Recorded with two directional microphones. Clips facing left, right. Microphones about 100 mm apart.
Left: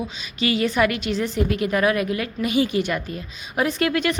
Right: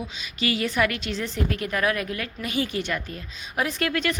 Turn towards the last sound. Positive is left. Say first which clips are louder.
# left 4 dB
turn(degrees=15)  # may be behind; listen again after turning